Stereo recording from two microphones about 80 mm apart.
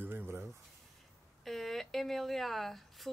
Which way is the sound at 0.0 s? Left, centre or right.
Right.